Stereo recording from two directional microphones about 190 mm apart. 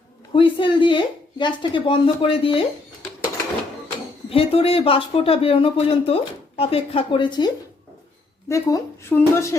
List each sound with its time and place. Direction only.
0.3 s speech: 25° left (ahead or behind)
4.3 s speech: 30° left (ahead or behind); by 9.6 s 15° left (ahead or behind)